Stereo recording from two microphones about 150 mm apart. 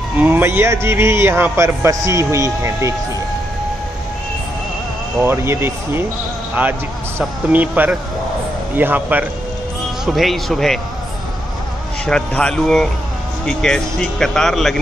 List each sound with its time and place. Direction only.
0.2 s a man's voice: 15° right (ahead or behind)
5.2 s a man's voice: 15° right (ahead or behind)
10.0 s speech: centre (ahead or behind)
12.1 s speech: 5° left (ahead or behind)